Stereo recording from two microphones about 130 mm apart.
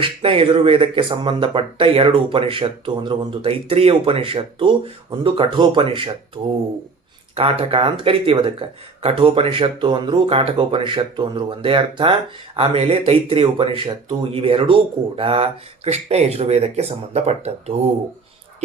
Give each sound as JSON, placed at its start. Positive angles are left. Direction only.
{"t": 0.0, "sound": "speech", "side_deg": -45}